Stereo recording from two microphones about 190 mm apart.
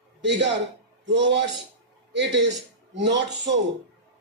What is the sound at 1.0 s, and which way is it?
Speech, 70° right (ahead or behind).